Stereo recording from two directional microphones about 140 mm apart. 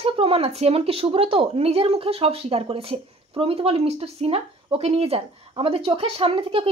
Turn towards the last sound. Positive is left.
turn(degrees=-40)  # may be behind; listen again after turning